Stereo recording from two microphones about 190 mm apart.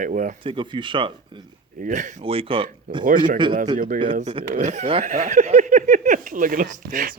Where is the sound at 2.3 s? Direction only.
30° right (ahead or behind).